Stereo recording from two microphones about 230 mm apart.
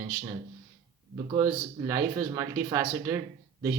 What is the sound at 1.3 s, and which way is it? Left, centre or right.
A man's voice, centre.